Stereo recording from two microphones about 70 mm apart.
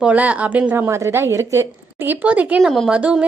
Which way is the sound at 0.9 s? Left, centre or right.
Right.